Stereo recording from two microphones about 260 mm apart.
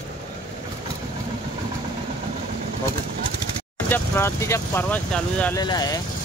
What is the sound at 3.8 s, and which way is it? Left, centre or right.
Speech, centre.